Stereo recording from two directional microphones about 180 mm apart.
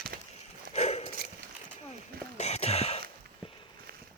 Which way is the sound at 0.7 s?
40° left (ahead or behind).